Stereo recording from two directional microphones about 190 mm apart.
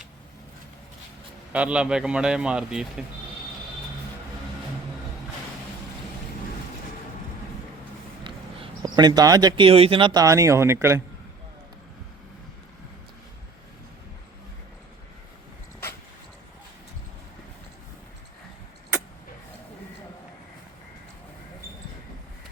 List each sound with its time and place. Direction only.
1.5 s a man's voice: 5° right (ahead or behind)
8.2 s speech: 25° right (ahead or behind)